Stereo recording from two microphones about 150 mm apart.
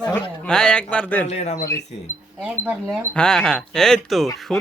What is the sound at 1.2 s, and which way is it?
Speech, 50° left (ahead or behind).